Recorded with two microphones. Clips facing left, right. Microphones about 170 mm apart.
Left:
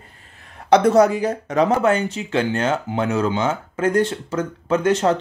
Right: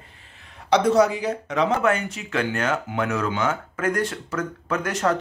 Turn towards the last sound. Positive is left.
turn(degrees=25)  # may be behind; listen again after turning